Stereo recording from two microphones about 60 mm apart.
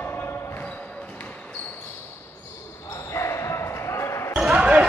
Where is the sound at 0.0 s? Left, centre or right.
Left.